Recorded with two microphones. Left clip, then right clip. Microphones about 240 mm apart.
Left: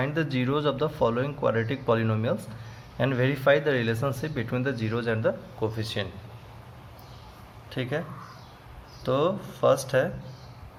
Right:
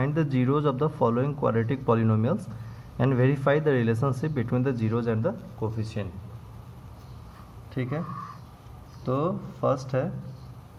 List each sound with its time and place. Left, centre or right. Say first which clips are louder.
0.0 s speech: even; centre
7.7 s speech: left 2 dB; left
9.0 s speech: left 3 dB; left